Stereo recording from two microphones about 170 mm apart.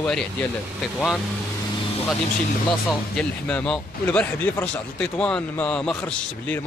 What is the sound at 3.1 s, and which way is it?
Speech, 5° left (ahead or behind).